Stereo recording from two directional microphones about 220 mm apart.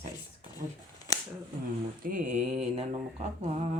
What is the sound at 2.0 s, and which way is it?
Mantra, 35° right (ahead or behind).